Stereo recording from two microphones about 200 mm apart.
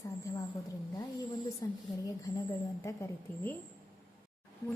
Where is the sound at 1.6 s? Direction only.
15° left (ahead or behind).